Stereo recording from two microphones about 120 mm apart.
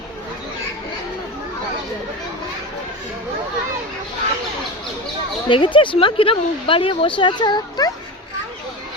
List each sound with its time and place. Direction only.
5.5 s speech: 45° left (ahead or behind)